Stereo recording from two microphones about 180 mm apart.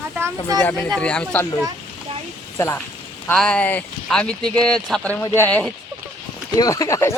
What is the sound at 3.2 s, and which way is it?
Speech, 5° left (ahead or behind).